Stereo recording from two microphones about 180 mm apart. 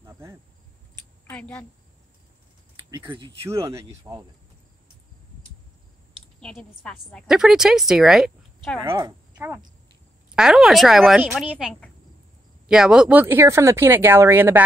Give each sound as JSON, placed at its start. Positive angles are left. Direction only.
{"t": 0.0, "sound": "cricket", "side_deg": -15}
{"t": 1.3, "sound": "speech", "side_deg": 5}
{"t": 3.0, "sound": "speech", "side_deg": -25}
{"t": 3.4, "sound": "speech", "side_deg": -15}
{"t": 6.4, "sound": "a woman's voice", "side_deg": 0}
{"t": 8.8, "sound": "speech", "side_deg": -15}
{"t": 10.3, "sound": "a woman's voice", "side_deg": -5}